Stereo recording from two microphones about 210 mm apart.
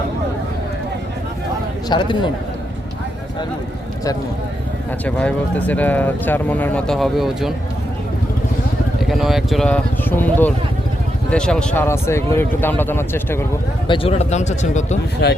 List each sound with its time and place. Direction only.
1.9 s a man's voice: 20° left (ahead or behind)
5.0 s speech: 5° left (ahead or behind)
9.0 s speech: centre (ahead or behind)
13.8 s speech: 25° left (ahead or behind)
15.2 s speech: 55° left (ahead or behind)